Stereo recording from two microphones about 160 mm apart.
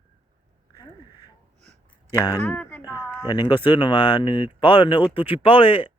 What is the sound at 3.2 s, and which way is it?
Speech, 30° left (ahead or behind).